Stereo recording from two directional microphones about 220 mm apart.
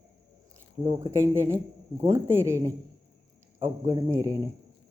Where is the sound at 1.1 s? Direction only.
10° right (ahead or behind).